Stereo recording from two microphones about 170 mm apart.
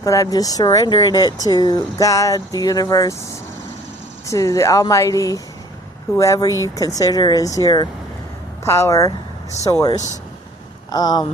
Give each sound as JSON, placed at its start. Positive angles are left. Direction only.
{"t": 0.0, "sound": "speech", "side_deg": 20}
{"t": 4.3, "sound": "speech", "side_deg": 20}
{"t": 10.9, "sound": "speech", "side_deg": 25}